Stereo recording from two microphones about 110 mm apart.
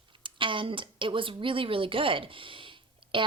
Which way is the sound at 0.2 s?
50° right (ahead or behind).